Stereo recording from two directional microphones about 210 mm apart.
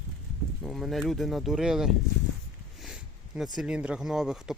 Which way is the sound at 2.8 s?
Centre (ahead or behind).